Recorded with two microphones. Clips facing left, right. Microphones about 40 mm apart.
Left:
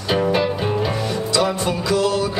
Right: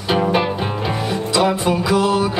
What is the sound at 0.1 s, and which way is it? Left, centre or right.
Music, centre.